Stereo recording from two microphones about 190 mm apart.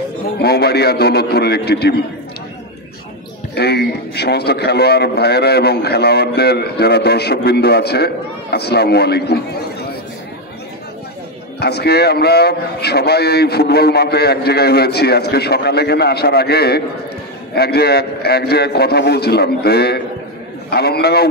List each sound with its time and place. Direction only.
0.4 s a man's voice: 60° left (ahead or behind)
3.5 s a man's voice: 60° left (ahead or behind)
11.6 s a man's voice: 60° left (ahead or behind)